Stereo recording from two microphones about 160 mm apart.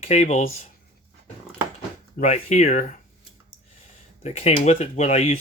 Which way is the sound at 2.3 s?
45° left (ahead or behind).